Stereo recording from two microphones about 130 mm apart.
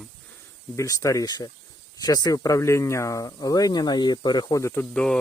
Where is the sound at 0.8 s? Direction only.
25° left (ahead or behind).